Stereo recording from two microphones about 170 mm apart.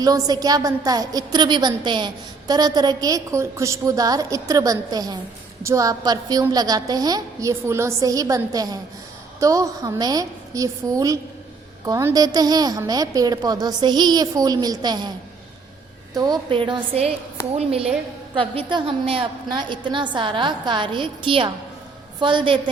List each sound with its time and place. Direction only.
0.0 s a woman's voice: 20° right (ahead or behind)
16.1 s a woman's voice: 25° right (ahead or behind)